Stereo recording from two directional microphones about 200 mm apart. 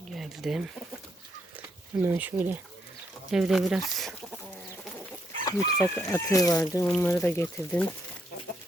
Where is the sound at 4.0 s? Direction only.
Centre (ahead or behind).